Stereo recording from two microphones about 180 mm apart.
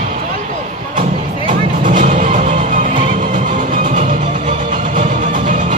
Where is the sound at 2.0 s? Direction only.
45° right (ahead or behind).